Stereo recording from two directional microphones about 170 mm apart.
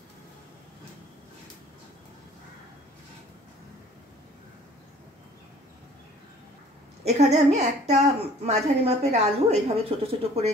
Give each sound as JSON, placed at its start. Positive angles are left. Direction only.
{"t": 7.1, "sound": "a woman's voice", "side_deg": -40}